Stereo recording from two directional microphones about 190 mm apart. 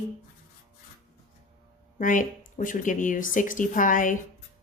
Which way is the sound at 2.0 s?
45° left (ahead or behind).